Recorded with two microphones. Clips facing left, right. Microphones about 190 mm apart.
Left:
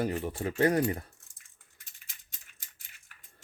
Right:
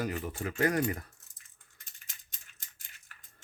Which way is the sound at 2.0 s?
5° left (ahead or behind).